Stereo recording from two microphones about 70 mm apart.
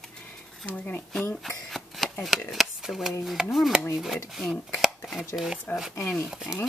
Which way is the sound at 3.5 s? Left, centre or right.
Centre.